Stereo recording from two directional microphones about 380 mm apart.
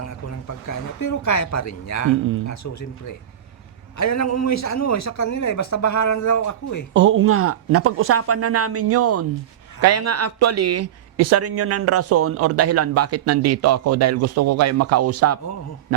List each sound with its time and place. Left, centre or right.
0.1 s a man's voice: left
6.9 s speech: right